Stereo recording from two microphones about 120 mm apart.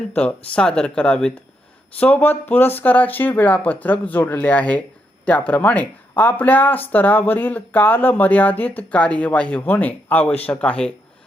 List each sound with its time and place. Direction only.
0.1 s speech: 10° left (ahead or behind)